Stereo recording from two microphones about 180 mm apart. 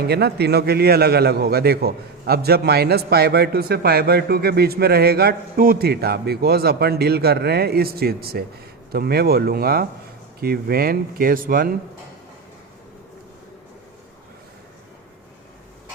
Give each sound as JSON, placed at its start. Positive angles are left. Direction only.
{"t": 0.0, "sound": "a man's voice", "side_deg": -65}